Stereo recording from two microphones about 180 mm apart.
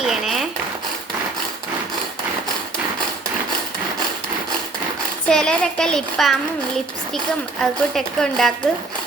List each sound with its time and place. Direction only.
0.0 s a sound: centre (ahead or behind)
5.3 s a child's voice: 5° left (ahead or behind)
7.6 s a child's voice: centre (ahead or behind)